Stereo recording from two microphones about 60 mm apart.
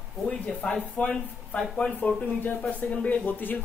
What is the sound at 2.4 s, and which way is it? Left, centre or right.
Speech, left.